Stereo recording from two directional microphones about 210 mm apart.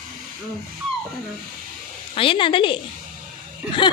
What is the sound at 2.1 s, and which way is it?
Speech, 25° left (ahead or behind).